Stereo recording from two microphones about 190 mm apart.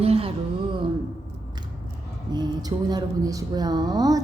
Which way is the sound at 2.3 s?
20° right (ahead or behind).